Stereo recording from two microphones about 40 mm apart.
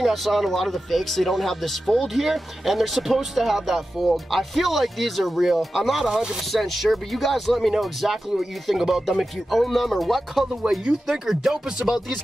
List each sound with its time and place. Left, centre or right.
0.0 s speech: centre
6.0 s speech: centre
6.5 s speech: centre